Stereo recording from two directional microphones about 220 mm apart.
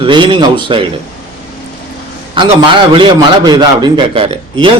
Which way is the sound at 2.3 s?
25° right (ahead or behind).